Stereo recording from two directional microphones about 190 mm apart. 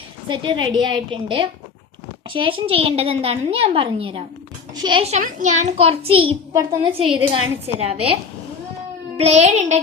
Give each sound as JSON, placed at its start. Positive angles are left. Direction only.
{"t": 0.3, "sound": "a woman's voice", "side_deg": -25}